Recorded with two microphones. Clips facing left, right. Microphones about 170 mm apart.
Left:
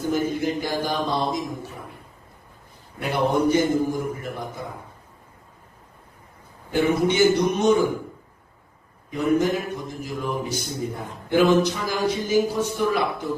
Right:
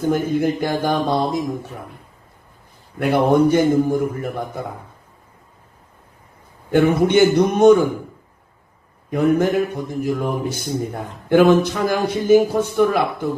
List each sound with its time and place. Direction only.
0.1 s speech: 55° right (ahead or behind)
3.0 s a man's voice: 55° right (ahead or behind)
6.7 s a man's voice: 55° right (ahead or behind)
9.0 s a man's voice: 55° right (ahead or behind)